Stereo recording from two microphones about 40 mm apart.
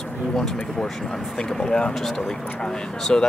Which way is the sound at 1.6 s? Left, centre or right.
Centre.